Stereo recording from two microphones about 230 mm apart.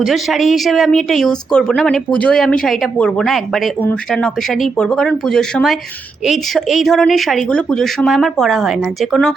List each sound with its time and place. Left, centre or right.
0.0 s speech: centre